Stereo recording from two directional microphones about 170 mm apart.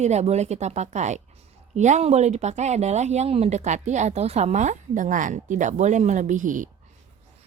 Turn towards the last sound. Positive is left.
turn(degrees=-50)  # may be behind; listen again after turning